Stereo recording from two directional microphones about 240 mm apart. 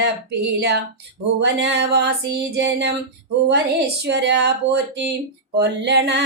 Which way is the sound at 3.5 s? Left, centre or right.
Right.